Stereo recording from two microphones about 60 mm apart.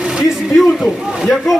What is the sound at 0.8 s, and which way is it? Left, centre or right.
Speech, centre.